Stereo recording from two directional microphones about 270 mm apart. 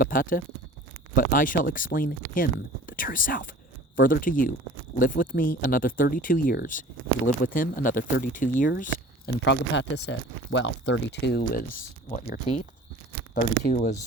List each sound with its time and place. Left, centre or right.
0.0 s speech: left